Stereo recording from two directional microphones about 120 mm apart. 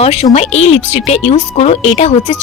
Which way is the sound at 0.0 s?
55° left (ahead or behind).